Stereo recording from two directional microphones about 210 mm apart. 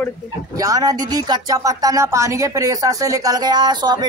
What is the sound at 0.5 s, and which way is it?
A man's voice, 15° right (ahead or behind).